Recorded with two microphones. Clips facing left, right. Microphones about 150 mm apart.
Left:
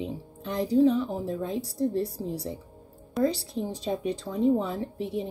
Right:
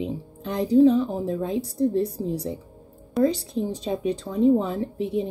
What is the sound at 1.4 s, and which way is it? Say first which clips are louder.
Speech: right 5 dB; 20° right (ahead or behind).